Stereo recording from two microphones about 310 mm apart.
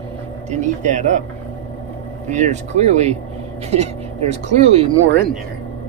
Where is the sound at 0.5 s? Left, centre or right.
Right.